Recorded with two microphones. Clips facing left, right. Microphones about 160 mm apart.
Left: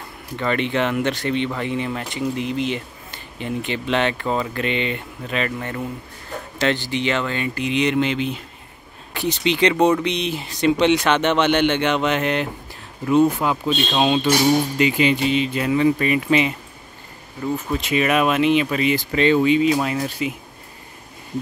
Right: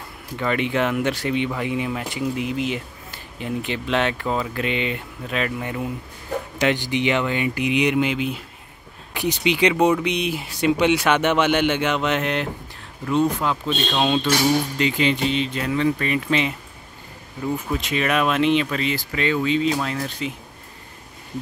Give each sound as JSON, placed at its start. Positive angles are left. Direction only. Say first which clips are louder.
{"t": 0.4, "sound": "speech", "louder": "left 1 dB", "side_deg": -5}
{"t": 17.6, "sound": "speech", "louder": "left 5 dB", "side_deg": 0}
{"t": 18.9, "sound": "speech", "louder": "left 6 dB", "side_deg": 25}
{"t": 19.4, "sound": "speech", "louder": "left 4 dB", "side_deg": 10}